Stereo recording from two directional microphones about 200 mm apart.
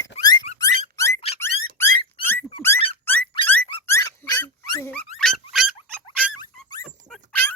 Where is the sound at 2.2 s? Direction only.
10° left (ahead or behind).